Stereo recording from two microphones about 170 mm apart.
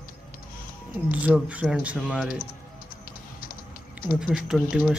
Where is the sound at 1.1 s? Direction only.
5° right (ahead or behind).